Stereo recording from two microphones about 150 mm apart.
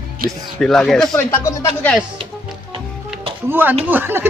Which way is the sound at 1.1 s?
20° left (ahead or behind).